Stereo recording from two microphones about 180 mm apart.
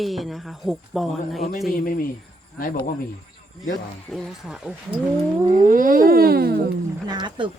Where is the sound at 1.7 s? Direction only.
50° left (ahead or behind).